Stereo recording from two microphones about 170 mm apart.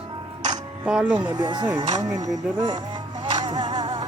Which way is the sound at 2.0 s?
20° right (ahead or behind).